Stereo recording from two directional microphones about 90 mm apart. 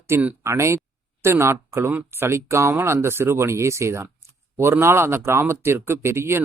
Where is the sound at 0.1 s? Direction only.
30° right (ahead or behind).